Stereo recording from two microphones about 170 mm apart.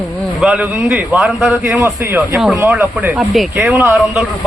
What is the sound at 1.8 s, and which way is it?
A man's voice, 15° right (ahead or behind).